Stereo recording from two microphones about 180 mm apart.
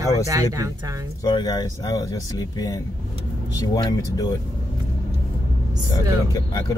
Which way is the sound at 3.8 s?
20° left (ahead or behind).